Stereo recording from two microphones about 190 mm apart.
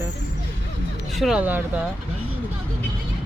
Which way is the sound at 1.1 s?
Centre (ahead or behind).